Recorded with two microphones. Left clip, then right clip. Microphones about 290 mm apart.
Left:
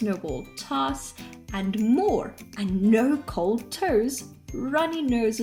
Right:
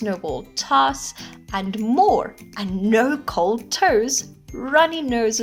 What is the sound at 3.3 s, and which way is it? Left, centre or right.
Speech, right.